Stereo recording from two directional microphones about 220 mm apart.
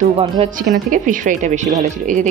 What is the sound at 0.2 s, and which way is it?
Speech, 30° right (ahead or behind).